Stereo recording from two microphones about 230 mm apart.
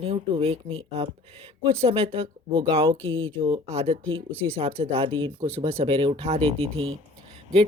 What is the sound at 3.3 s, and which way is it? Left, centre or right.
A woman's voice, right.